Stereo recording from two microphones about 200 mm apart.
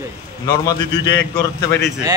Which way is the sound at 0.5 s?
20° left (ahead or behind).